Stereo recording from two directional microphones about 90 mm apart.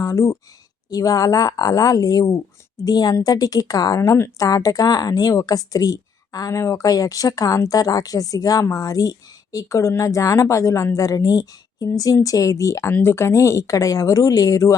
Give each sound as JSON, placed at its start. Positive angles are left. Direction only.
{"t": 0.0, "sound": "speech", "side_deg": 35}
{"t": 0.9, "sound": "a woman's voice", "side_deg": 45}
{"t": 2.8, "sound": "speech", "side_deg": 50}